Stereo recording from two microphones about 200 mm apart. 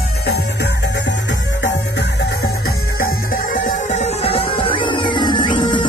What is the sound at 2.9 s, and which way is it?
Music, 45° left (ahead or behind).